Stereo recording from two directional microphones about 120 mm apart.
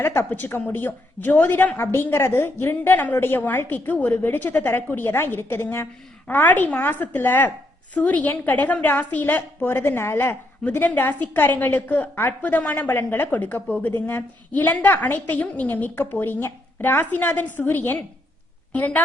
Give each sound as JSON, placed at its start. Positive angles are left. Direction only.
{"t": 0.0, "sound": "a woman's voice", "side_deg": 20}